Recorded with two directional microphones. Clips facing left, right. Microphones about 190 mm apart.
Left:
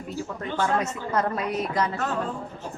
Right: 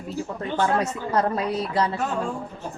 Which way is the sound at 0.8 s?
35° right (ahead or behind).